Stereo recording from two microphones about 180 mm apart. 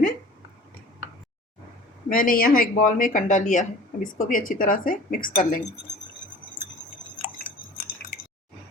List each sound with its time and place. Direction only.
2.0 s speech: 50° left (ahead or behind)